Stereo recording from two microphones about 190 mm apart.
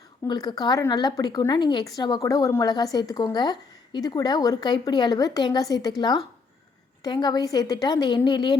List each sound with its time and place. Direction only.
0.3 s a woman's voice: 20° left (ahead or behind)